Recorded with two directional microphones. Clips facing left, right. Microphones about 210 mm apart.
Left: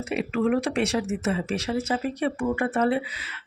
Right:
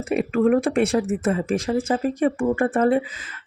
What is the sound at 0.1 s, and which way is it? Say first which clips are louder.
Speech: right 5 dB; 50° right (ahead or behind).